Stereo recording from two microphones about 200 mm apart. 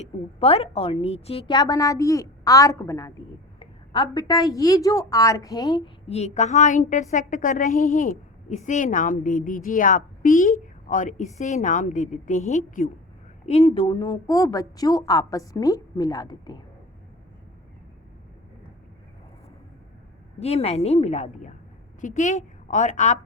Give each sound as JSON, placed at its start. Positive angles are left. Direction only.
{"t": 0.0, "sound": "a woman's voice", "side_deg": 30}
{"t": 6.1, "sound": "a woman's voice", "side_deg": 30}
{"t": 20.4, "sound": "a woman's voice", "side_deg": 30}